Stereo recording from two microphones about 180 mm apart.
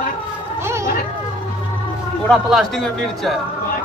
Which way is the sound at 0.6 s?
15° right (ahead or behind).